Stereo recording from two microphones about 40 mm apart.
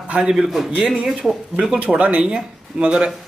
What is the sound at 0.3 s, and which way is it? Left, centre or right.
Speech, centre.